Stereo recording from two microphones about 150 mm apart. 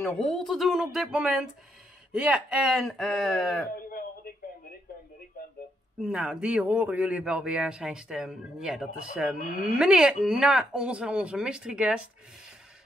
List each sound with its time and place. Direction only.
0.0 s speech: 5° left (ahead or behind)
3.7 s a sound: 80° left
5.9 s speech: 5° right (ahead or behind)